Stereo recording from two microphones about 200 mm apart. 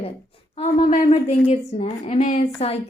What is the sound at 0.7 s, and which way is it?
A woman's voice, 40° left (ahead or behind).